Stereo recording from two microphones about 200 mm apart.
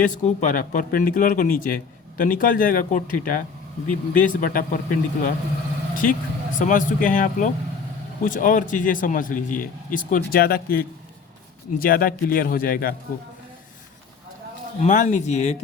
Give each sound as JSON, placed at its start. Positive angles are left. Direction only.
{"t": 0.0, "sound": "a man's voice", "side_deg": 40}
{"t": 14.8, "sound": "speech", "side_deg": 40}